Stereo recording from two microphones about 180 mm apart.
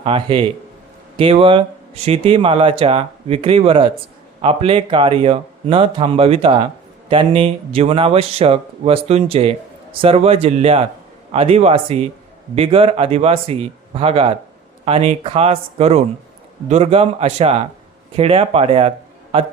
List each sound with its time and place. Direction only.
0.0 s speech: 30° right (ahead or behind)